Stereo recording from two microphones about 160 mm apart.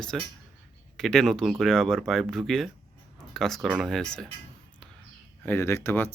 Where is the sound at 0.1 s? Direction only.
Centre (ahead or behind).